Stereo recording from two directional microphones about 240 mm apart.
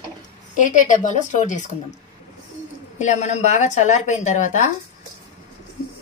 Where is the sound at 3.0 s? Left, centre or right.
Left.